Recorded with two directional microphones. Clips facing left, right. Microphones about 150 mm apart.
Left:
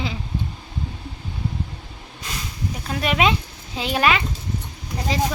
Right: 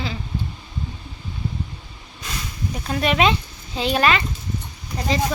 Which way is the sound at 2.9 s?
5° left (ahead or behind).